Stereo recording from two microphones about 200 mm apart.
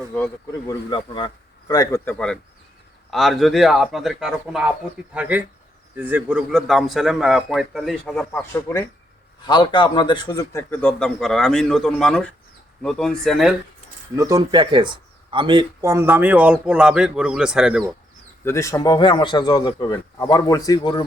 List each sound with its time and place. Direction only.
0.7 s a man's voice: 25° left (ahead or behind)
9.5 s a man's voice: 25° left (ahead or behind); by 13.6 s centre (ahead or behind)
14.2 s speech: 15° right (ahead or behind)
18.4 s speech: 15° left (ahead or behind)